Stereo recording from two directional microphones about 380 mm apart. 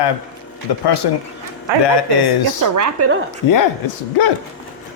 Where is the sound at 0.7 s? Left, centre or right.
Left.